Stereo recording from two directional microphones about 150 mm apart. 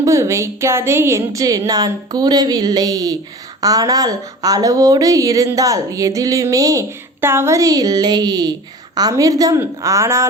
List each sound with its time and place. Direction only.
0.0 s speech: 20° right (ahead or behind)